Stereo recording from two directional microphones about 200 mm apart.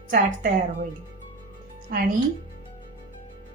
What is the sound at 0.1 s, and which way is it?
Speech, 45° right (ahead or behind).